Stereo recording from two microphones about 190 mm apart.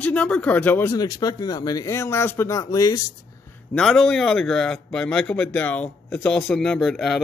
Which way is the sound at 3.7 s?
Centre (ahead or behind).